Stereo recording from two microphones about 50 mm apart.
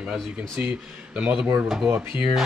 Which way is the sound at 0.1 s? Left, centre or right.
Right.